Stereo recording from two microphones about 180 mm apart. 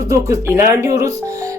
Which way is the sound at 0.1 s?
15° right (ahead or behind).